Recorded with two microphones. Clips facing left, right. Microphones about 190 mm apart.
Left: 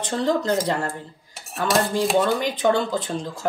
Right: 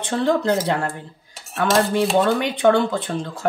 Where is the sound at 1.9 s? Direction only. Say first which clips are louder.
Right 2 dB; 65° right (ahead or behind).